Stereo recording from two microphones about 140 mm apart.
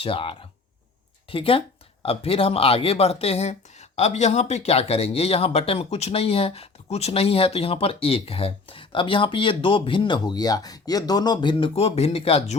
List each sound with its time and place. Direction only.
0.0 s speech: 40° left (ahead or behind)